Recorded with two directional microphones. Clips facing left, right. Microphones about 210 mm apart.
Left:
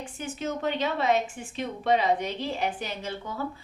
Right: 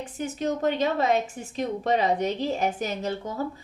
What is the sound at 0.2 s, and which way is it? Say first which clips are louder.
A woman's voice: right 5 dB; 40° right (ahead or behind).